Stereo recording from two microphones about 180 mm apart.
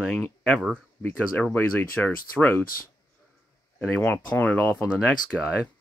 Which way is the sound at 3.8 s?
5° left (ahead or behind).